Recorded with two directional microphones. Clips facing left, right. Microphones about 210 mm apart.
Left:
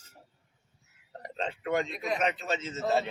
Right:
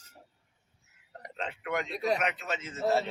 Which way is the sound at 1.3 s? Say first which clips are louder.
Left 4 dB; 30° left (ahead or behind).